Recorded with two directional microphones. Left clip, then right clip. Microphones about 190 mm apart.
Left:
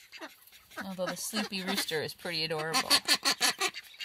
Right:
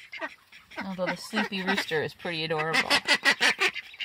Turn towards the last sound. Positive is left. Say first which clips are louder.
# right 6 dB
turn(degrees=50)  # may be behind; listen again after turning